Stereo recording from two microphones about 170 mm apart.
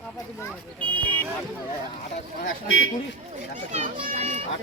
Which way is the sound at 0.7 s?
10° left (ahead or behind).